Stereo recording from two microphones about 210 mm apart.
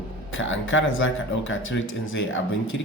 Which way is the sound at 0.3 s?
65° left (ahead or behind).